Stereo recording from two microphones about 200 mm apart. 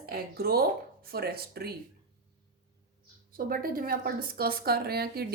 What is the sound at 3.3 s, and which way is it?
A woman's voice, 45° right (ahead or behind).